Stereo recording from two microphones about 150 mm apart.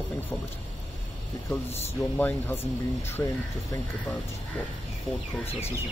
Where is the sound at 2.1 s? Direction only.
15° left (ahead or behind).